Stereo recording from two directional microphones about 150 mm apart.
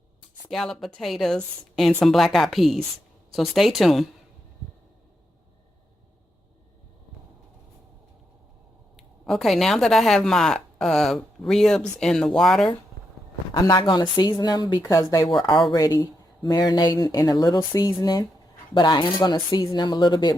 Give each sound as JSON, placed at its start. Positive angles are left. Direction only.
{"t": 0.4, "sound": "speech", "side_deg": 5}
{"t": 9.0, "sound": "speech", "side_deg": 0}
{"t": 13.5, "sound": "speech", "side_deg": 30}